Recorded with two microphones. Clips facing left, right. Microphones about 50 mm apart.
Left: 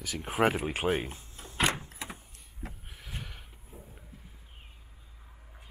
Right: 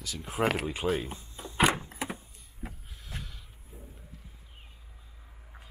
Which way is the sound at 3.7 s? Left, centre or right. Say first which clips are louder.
Even; centre.